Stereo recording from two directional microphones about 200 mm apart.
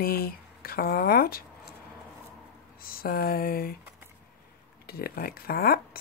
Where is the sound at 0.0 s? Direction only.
50° left (ahead or behind).